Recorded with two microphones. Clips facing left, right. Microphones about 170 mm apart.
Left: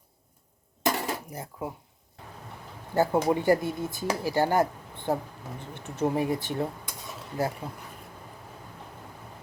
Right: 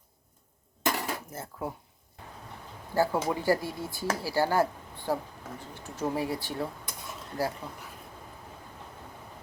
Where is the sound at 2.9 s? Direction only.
20° left (ahead or behind).